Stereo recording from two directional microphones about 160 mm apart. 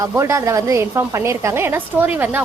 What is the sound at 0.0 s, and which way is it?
A woman's voice, 20° right (ahead or behind).